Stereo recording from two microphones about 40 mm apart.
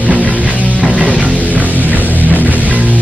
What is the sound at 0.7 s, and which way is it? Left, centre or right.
Music, left.